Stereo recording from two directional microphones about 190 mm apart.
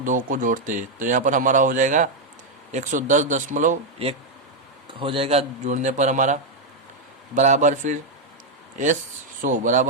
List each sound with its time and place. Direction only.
0.0 s a man's voice: 45° right (ahead or behind)
9.4 s speech: 45° right (ahead or behind)